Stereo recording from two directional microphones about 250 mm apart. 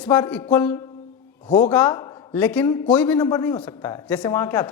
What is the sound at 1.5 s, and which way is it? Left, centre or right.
Speech, left.